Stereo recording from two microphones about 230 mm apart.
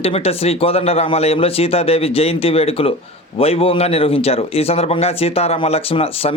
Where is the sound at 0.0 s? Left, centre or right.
Left.